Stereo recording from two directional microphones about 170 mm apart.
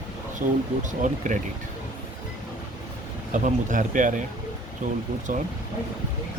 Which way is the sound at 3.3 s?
45° right (ahead or behind).